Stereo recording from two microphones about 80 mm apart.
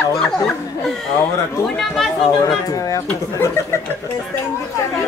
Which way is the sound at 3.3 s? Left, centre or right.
Left.